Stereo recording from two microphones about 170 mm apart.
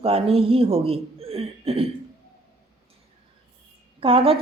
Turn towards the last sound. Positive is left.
turn(degrees=-35)  # may be behind; listen again after turning